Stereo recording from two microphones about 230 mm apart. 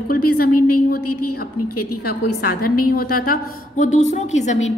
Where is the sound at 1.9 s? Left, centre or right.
Left.